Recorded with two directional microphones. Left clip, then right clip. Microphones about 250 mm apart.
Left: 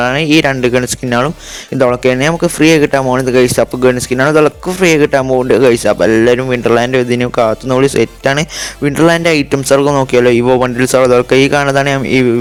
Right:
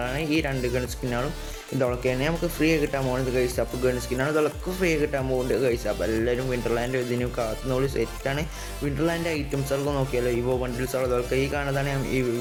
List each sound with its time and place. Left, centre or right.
0.0 s speech: right